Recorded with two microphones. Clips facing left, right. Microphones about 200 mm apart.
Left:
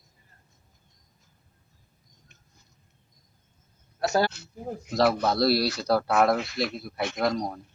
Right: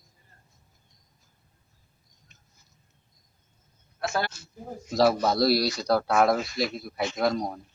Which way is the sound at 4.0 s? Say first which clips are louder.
Left 5 dB; 40° left (ahead or behind).